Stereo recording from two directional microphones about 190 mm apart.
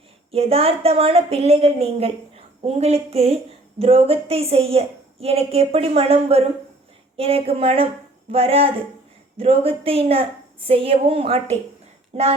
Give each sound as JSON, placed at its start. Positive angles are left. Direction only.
{"t": 0.3, "sound": "a woman's voice", "side_deg": -30}